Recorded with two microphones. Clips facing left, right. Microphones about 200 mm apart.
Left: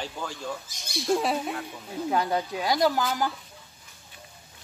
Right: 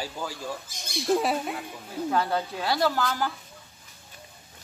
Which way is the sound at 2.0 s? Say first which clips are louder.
Even; 15° left (ahead or behind).